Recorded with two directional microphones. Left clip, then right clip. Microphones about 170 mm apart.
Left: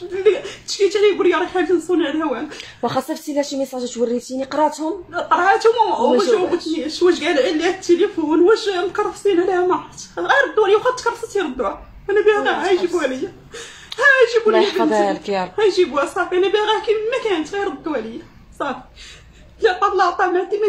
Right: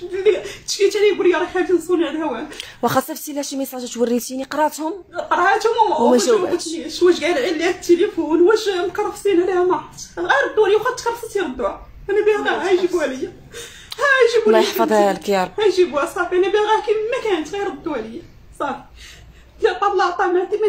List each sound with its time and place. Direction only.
0.2 s a woman's voice: 10° right (ahead or behind)
2.8 s speech: 40° right (ahead or behind)
5.1 s a woman's voice: 10° right (ahead or behind)
6.1 s speech: 50° right (ahead or behind)
6.9 s a woman's voice: 5° right (ahead or behind)
14.5 s speech: 35° right (ahead or behind)
15.5 s a woman's voice: centre (ahead or behind)
19.6 s a woman's voice: 5° right (ahead or behind)